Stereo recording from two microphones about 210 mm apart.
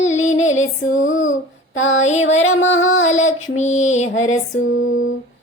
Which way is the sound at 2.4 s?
65° left (ahead or behind).